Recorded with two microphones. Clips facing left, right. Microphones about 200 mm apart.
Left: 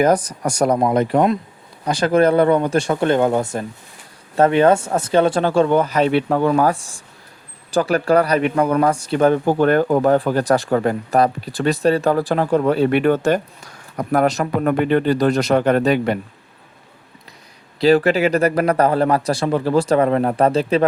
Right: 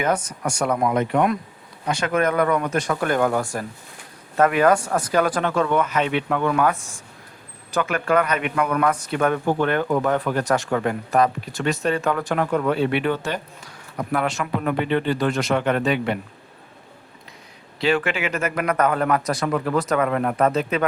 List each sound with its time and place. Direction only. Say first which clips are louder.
0.0 s speech: left 7 dB; 35° left (ahead or behind)
17.7 s speech: left 8 dB; 35° left (ahead or behind)